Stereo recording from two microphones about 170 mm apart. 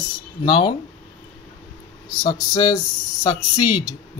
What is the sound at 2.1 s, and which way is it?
Speech, 25° left (ahead or behind).